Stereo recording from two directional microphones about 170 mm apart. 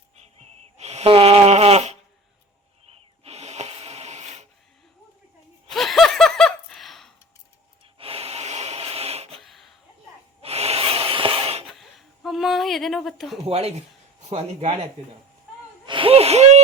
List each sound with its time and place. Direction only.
0.2 s a sound: 40° right (ahead or behind)
5.7 s laughter: centre (ahead or behind)
7.9 s snort: 35° right (ahead or behind)
9.4 s laughter: centre (ahead or behind)
10.4 s gasp: 35° right (ahead or behind)
11.6 s a sound: centre (ahead or behind)
13.4 s speech: 35° right (ahead or behind)
15.9 s gasp: 30° right (ahead or behind)